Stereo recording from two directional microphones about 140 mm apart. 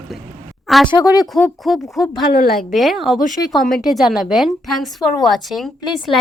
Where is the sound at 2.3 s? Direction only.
90° left.